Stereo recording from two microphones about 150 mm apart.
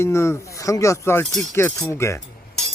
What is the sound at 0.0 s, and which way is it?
Speech, 20° left (ahead or behind).